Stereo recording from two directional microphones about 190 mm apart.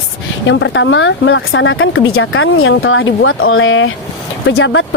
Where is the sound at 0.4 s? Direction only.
75° left (ahead or behind).